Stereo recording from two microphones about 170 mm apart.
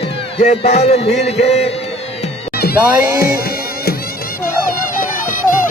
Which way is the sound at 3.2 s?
60° left (ahead or behind).